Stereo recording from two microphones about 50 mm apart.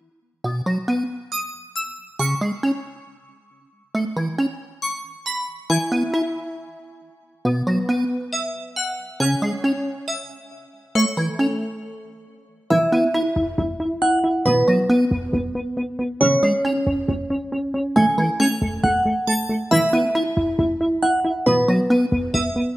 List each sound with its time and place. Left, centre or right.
0.4 s music: centre
3.9 s music: centre
12.6 s music: centre
13.9 s music: centre
14.2 s music: centre